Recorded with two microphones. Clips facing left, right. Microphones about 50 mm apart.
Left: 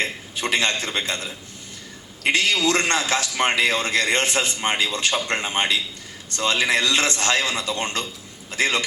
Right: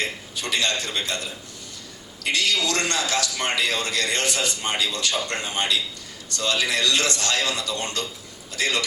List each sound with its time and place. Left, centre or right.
0.0 s a man's voice: left